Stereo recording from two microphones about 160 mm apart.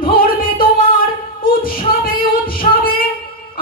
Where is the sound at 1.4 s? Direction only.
65° left (ahead or behind).